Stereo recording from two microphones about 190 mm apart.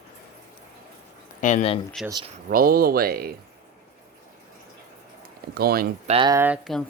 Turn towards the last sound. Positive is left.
turn(degrees=-10)  # may be behind; listen again after turning